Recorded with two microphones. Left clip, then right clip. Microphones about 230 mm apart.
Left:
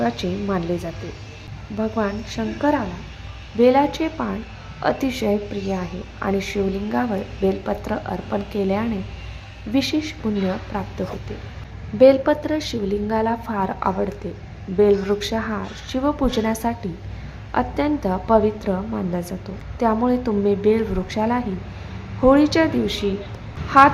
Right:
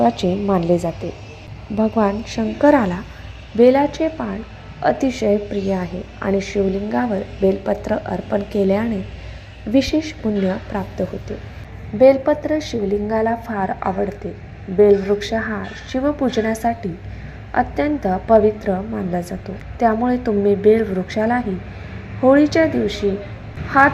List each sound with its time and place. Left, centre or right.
0.0 s a woman's voice: centre
3.6 s a woman's voice: centre
11.9 s a woman's voice: centre